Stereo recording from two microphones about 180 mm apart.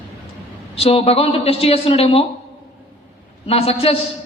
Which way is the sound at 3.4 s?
35° left (ahead or behind).